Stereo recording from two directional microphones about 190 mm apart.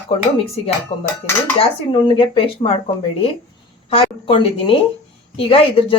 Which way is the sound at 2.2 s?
30° left (ahead or behind).